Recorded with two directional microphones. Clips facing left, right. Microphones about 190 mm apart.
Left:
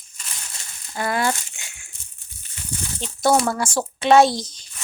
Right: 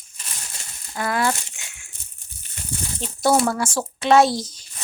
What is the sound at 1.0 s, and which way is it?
Crumpling, centre (ahead or behind).